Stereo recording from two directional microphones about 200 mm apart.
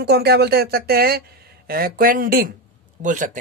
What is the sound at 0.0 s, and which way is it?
Speech, 55° right (ahead or behind).